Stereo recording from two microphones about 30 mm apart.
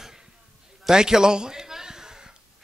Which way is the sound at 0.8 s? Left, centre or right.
Right.